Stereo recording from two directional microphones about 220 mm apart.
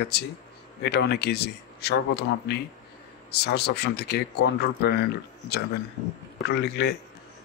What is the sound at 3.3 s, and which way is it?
Speech, 45° left (ahead or behind).